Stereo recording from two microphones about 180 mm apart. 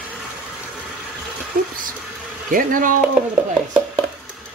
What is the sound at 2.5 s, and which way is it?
Speech, 50° right (ahead or behind).